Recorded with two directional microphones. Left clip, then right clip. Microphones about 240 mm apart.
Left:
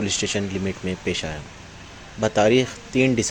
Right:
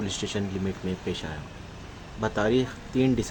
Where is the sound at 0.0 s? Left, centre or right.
Centre.